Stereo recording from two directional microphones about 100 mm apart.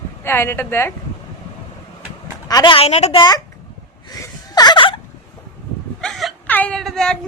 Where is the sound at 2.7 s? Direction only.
90° left.